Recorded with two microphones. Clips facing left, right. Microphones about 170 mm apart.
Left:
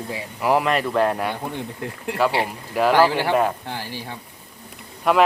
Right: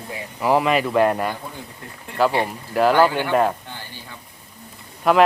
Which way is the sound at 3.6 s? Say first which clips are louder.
Left 7 dB; 85° left.